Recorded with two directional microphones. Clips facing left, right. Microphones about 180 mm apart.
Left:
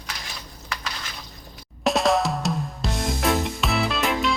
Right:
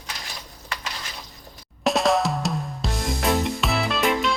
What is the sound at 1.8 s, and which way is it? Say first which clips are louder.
Drum kit: even; centre (ahead or behind).